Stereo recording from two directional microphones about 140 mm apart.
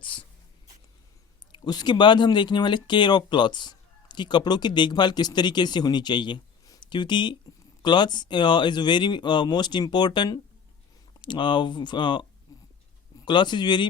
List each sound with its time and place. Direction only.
0.0 s dog: 35° left (ahead or behind)
1.5 s speech: 30° left (ahead or behind)
12.5 s hiccup: 25° left (ahead or behind)
13.1 s speech: 35° left (ahead or behind)